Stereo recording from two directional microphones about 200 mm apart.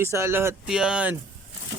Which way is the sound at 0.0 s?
10° right (ahead or behind).